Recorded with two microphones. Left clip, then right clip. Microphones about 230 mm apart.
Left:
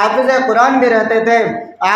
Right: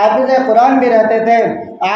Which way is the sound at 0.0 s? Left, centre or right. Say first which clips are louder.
Right 1 dB; left.